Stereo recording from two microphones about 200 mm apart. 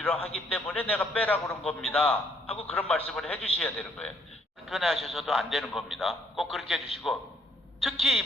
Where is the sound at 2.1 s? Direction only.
30° left (ahead or behind).